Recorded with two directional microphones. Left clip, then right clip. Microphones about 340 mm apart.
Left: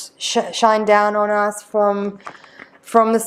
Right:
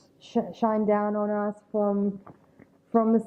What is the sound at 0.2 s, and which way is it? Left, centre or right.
A woman's voice, centre.